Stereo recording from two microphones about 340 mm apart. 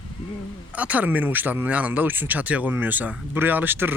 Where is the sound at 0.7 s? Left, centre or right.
Centre.